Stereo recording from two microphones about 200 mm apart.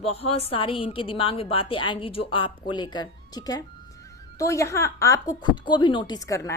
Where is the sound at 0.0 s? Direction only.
30° left (ahead or behind).